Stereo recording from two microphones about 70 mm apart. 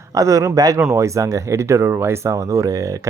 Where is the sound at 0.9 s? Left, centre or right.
Right.